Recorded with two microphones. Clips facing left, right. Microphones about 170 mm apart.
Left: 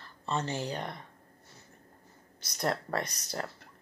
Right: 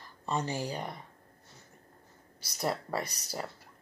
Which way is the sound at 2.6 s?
5° right (ahead or behind).